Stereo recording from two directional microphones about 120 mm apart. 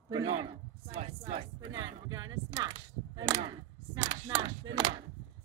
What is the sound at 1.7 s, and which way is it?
Chop, 35° right (ahead or behind).